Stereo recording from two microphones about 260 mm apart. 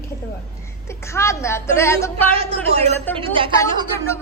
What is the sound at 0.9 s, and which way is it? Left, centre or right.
A woman's voice, centre.